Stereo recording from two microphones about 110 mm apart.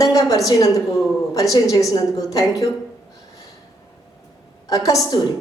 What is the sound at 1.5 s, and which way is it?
A woman's voice, 30° left (ahead or behind).